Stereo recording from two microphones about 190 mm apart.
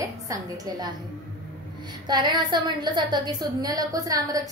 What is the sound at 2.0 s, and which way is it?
A woman's voice, 20° right (ahead or behind).